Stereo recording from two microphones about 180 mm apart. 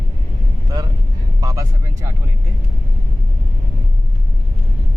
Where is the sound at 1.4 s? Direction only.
20° right (ahead or behind).